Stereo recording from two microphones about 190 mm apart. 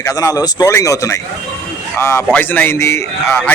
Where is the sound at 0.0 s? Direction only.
15° left (ahead or behind).